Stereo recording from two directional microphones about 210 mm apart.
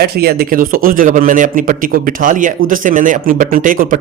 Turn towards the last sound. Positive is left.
turn(degrees=-40)  # may be behind; listen again after turning